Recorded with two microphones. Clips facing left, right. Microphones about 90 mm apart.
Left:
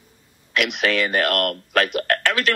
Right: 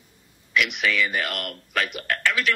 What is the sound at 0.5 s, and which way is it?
A man's voice, 80° left.